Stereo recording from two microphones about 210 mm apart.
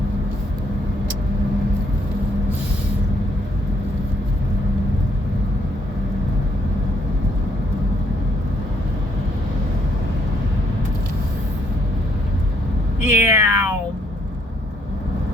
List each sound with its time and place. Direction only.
13.1 s cat: 10° right (ahead or behind)